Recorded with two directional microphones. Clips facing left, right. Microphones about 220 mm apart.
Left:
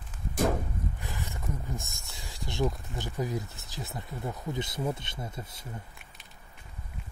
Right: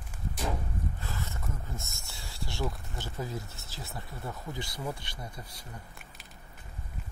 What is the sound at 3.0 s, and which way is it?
Speech, 15° left (ahead or behind).